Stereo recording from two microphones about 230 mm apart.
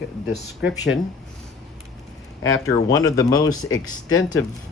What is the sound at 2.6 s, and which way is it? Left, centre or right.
Speech, centre.